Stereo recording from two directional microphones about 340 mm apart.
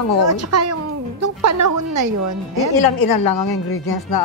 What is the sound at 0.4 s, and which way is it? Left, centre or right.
A woman's voice, right.